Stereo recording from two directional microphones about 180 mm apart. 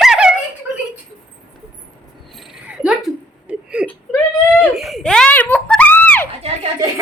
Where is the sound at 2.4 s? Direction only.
5° right (ahead or behind).